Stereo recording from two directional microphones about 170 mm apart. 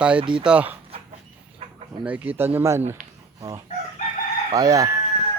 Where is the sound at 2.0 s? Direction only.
10° right (ahead or behind).